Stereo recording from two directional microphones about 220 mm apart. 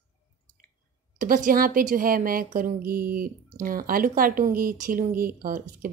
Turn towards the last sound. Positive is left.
turn(degrees=-40)  # may be behind; listen again after turning